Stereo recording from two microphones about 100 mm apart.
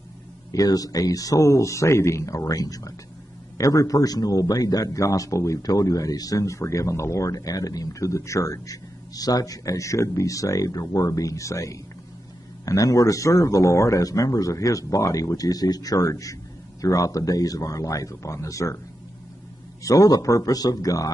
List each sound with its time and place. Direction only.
0.5 s a man's voice: 35° left (ahead or behind)
19.8 s a man's voice: 35° left (ahead or behind)